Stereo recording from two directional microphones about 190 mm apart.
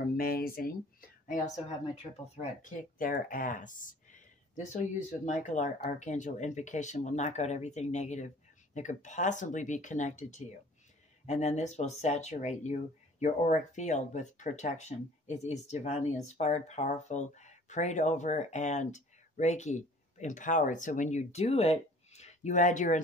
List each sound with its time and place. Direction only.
0.2 s speech: 50° left (ahead or behind)
2.3 s speech: 40° left (ahead or behind)